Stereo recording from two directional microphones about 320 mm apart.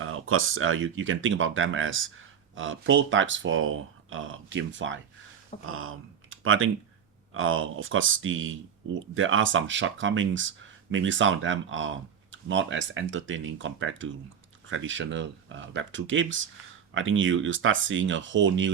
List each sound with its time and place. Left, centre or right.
0.0 s speech: right